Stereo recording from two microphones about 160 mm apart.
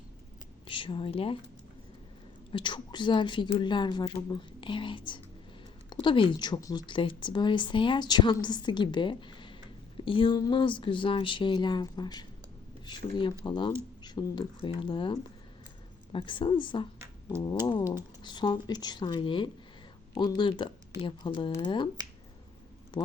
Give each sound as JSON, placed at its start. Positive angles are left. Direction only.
{"t": 0.7, "sound": "speech", "side_deg": 30}
{"t": 2.5, "sound": "speech", "side_deg": 30}
{"t": 18.2, "sound": "speech", "side_deg": 30}
{"t": 23.0, "sound": "speech", "side_deg": 30}